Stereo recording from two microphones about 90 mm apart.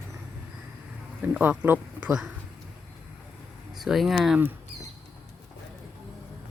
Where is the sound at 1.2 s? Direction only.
20° right (ahead or behind).